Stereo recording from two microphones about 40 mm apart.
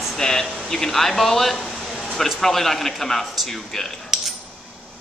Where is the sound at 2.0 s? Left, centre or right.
Centre.